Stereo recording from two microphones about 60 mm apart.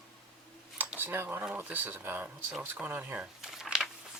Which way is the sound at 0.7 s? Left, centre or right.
Right.